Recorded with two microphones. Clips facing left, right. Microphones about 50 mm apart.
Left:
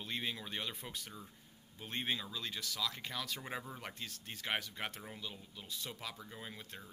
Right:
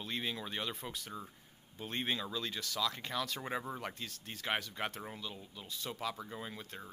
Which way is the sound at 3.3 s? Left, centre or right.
Right.